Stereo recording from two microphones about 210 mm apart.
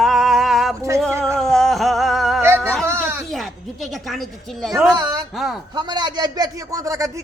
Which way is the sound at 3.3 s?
Centre (ahead or behind).